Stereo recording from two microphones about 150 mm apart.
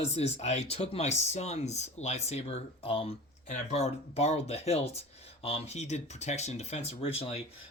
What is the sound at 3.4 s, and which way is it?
Speech, 50° left (ahead or behind).